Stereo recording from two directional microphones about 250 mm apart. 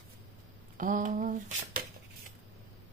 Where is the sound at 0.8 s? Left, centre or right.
Right.